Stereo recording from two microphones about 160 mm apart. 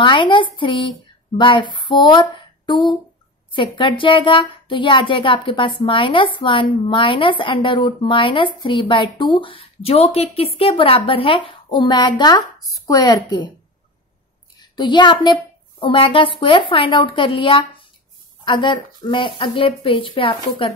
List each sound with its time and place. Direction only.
0.0 s speech: 30° left (ahead or behind)
14.6 s a woman's voice: 30° left (ahead or behind)